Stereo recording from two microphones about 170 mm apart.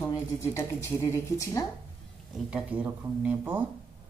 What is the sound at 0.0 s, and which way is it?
Speech, 15° left (ahead or behind).